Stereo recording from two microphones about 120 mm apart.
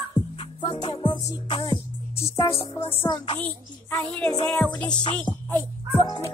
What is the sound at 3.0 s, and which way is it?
Speech, 40° left (ahead or behind).